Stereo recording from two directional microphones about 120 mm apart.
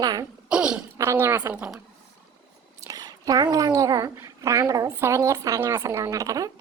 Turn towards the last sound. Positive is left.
turn(degrees=-30)  # may be behind; listen again after turning